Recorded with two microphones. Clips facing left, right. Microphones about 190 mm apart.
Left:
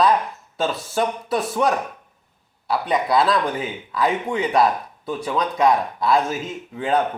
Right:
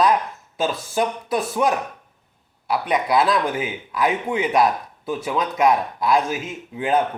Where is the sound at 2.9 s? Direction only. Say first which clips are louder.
Even; centre (ahead or behind).